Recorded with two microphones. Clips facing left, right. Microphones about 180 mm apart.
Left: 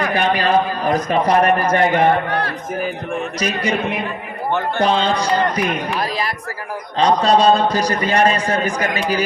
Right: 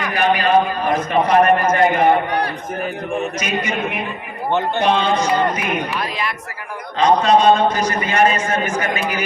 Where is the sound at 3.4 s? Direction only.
35° left (ahead or behind).